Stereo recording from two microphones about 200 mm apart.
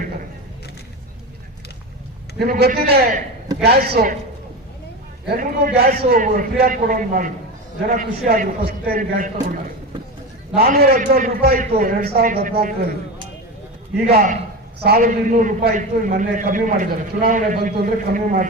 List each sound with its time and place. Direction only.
2.4 s a man's voice: 50° right (ahead or behind)
5.4 s a man's voice: 45° right (ahead or behind)
10.5 s a man's voice: 50° right (ahead or behind)
14.1 s a man's voice: 45° right (ahead or behind)